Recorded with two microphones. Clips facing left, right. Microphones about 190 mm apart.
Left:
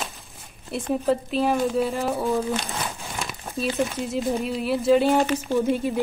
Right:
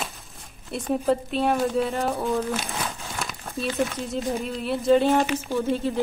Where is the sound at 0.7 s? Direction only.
Centre (ahead or behind).